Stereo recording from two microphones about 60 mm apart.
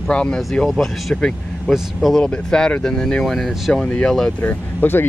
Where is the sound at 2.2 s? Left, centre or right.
Centre.